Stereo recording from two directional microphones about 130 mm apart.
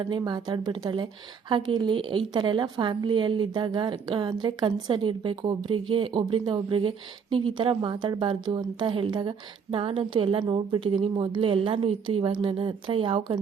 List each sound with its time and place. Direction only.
0.0 s a woman's voice: 35° right (ahead or behind)